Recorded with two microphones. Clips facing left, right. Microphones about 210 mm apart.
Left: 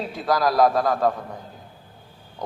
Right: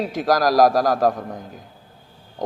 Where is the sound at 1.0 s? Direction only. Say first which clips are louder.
Right 3 dB; 45° right (ahead or behind).